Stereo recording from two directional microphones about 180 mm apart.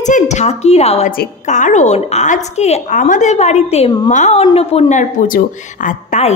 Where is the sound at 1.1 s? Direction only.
50° left (ahead or behind).